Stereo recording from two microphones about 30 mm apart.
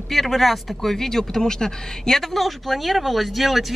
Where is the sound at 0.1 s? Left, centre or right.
Centre.